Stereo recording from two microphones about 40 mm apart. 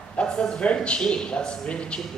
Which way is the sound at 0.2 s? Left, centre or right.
Left.